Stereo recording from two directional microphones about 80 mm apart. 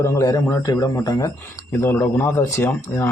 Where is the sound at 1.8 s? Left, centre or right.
Left.